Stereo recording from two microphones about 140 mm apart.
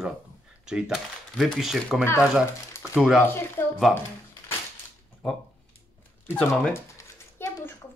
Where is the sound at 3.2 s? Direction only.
15° left (ahead or behind).